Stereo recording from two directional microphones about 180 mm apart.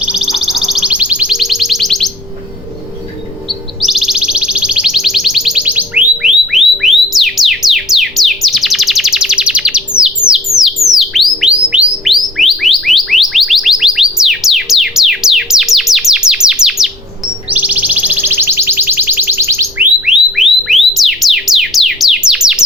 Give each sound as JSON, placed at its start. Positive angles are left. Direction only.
{"t": 0.0, "sound": "music", "side_deg": -5}
{"t": 3.8, "sound": "music", "side_deg": 0}
{"t": 20.1, "sound": "music", "side_deg": 0}